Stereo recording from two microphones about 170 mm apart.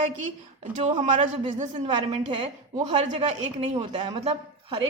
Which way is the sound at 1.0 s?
45° right (ahead or behind).